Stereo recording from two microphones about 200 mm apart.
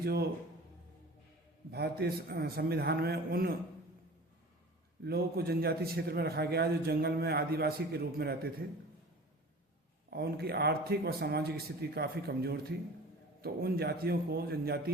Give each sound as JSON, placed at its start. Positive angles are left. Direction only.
{"t": 0.0, "sound": "a man's voice", "side_deg": -50}
{"t": 1.7, "sound": "a man's voice", "side_deg": -50}
{"t": 5.0, "sound": "a man's voice", "side_deg": -50}
{"t": 10.1, "sound": "a man's voice", "side_deg": -50}